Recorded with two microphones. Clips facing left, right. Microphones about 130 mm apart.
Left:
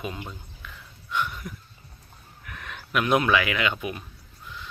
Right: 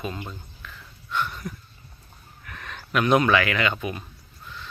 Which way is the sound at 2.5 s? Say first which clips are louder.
Right 1 dB; 10° left (ahead or behind).